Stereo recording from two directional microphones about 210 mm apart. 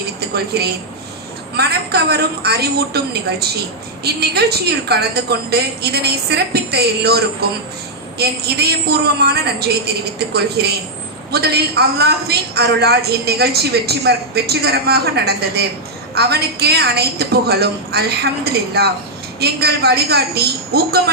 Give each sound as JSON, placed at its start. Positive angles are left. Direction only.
{"t": 0.3, "sound": "a woman's voice", "side_deg": -50}
{"t": 8.2, "sound": "a woman's voice", "side_deg": -50}